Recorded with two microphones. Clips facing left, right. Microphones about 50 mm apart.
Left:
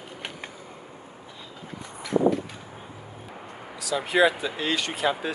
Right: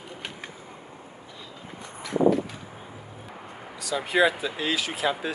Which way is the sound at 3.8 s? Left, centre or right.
Centre.